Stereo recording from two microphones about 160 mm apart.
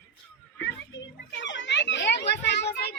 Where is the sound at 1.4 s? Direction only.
90° left.